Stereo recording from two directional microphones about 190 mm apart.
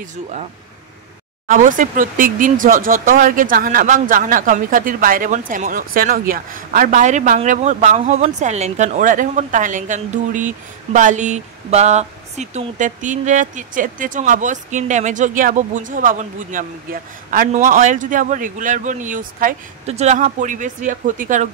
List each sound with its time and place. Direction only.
1.5 s speech: 45° right (ahead or behind)